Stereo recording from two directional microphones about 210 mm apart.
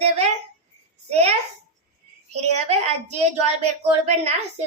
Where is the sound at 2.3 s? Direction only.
30° right (ahead or behind).